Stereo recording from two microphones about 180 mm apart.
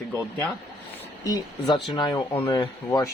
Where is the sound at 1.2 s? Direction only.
25° left (ahead or behind).